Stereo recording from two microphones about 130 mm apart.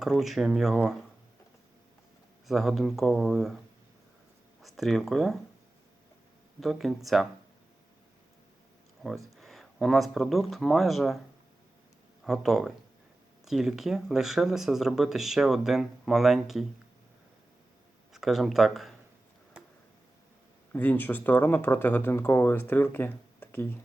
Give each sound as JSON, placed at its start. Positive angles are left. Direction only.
{"t": 0.0, "sound": "speech", "side_deg": -5}
{"t": 2.5, "sound": "speech", "side_deg": 0}
{"t": 4.6, "sound": "speech", "side_deg": 0}
{"t": 6.6, "sound": "speech", "side_deg": 0}
{"t": 9.3, "sound": "speech", "side_deg": 0}
{"t": 12.2, "sound": "speech", "side_deg": 0}
{"t": 18.1, "sound": "speech", "side_deg": 0}
{"t": 20.7, "sound": "speech", "side_deg": 15}